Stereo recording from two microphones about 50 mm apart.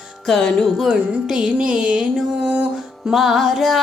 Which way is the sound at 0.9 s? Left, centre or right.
Centre.